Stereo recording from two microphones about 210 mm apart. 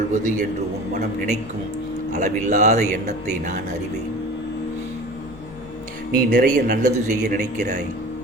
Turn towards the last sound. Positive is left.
turn(degrees=-40)  # may be behind; listen again after turning